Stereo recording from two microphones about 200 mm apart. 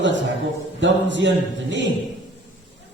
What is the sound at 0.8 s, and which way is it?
A man's voice, 65° right (ahead or behind).